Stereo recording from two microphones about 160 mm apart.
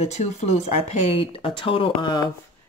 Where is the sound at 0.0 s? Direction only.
40° left (ahead or behind).